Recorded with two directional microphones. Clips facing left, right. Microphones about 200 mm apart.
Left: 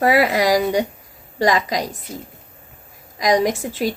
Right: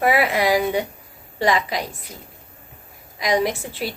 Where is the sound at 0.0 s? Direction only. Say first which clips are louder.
Left 3 dB; 40° left (ahead or behind).